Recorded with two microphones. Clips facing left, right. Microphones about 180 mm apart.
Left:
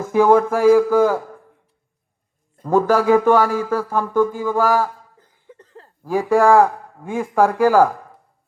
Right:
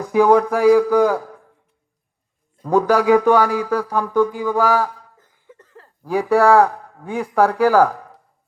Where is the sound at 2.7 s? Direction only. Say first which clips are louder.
Even; centre (ahead or behind).